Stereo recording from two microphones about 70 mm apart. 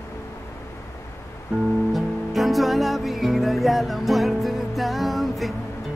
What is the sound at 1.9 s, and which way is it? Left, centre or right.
Music, centre.